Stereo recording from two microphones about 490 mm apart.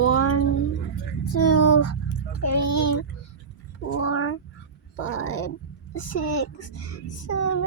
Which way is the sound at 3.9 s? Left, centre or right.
Left.